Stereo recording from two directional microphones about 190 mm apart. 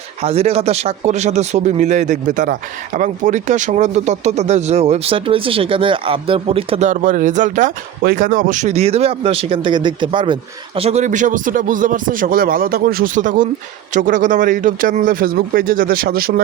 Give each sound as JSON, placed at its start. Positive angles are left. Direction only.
{"t": 0.2, "sound": "speech", "side_deg": -30}